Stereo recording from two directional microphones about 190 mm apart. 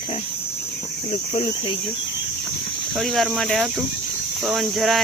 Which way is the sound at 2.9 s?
Centre (ahead or behind).